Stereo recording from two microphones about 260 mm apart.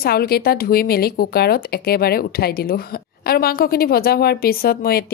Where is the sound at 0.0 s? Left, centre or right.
Left.